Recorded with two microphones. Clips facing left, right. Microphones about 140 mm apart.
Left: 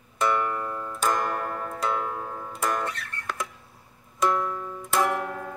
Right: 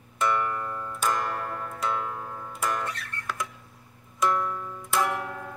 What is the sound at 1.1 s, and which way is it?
Clock, 15° left (ahead or behind).